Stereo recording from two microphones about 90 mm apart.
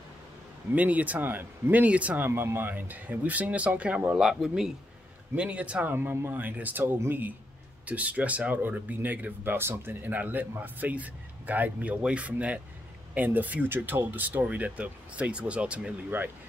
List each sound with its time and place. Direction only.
0.7 s speech: 15° right (ahead or behind)
4.2 s speech: 5° right (ahead or behind)
16.1 s speech: 25° right (ahead or behind)